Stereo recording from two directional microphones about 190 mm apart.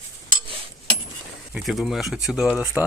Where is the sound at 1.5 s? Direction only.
Centre (ahead or behind).